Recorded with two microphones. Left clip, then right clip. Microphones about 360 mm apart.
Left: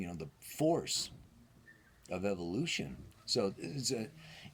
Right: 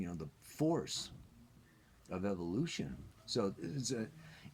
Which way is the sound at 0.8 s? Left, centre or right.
Centre.